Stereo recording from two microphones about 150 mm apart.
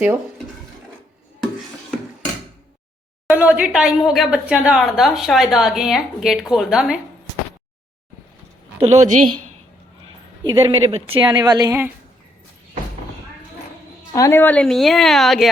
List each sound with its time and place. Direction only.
3.2 s a woman's voice: 10° right (ahead or behind)
8.8 s a woman's voice: 50° right (ahead or behind)
10.4 s speech: 35° right (ahead or behind)
14.1 s a woman's voice: 20° left (ahead or behind); by 15.4 s centre (ahead or behind)